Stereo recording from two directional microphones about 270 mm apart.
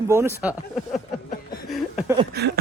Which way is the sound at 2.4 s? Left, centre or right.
Right.